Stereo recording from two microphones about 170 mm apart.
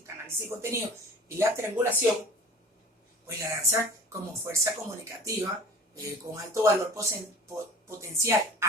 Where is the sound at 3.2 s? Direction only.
15° right (ahead or behind).